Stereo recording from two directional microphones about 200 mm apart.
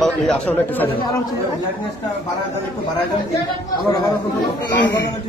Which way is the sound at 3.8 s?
20° left (ahead or behind).